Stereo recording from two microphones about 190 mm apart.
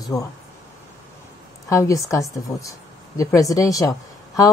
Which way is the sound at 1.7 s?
15° left (ahead or behind).